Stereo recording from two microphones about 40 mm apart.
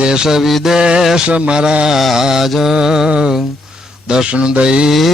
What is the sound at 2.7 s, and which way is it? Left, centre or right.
Speech, centre.